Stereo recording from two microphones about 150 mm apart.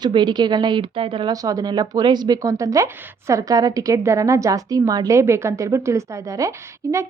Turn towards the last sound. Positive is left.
turn(degrees=-20)  # may be behind; listen again after turning